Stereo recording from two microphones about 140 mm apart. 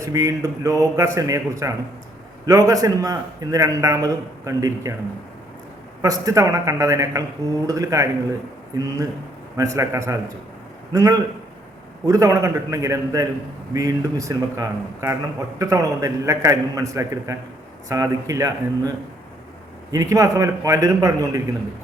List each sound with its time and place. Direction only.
0.0 s speech: 25° right (ahead or behind)
6.0 s speech: 25° right (ahead or behind)